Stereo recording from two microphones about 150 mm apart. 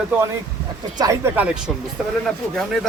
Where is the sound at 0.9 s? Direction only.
25° right (ahead or behind).